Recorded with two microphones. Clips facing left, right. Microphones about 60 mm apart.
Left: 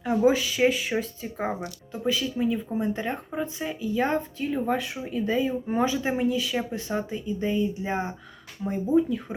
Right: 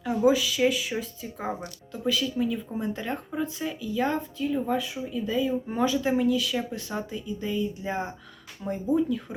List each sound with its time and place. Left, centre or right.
0.0 s speech: left
1.5 s speech: left
4.4 s speech: left